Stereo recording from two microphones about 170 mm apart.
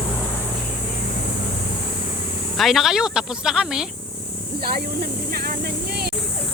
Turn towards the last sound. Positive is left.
turn(degrees=-65)  # may be behind; listen again after turning